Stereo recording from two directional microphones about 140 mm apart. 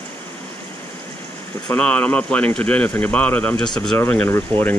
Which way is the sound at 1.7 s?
10° left (ahead or behind).